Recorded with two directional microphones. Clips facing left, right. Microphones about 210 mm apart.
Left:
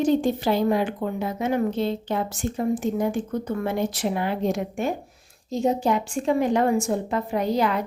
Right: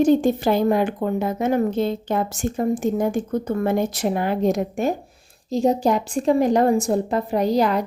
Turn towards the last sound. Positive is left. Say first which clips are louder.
# right 4 dB
turn(degrees=-35)  # may be behind; listen again after turning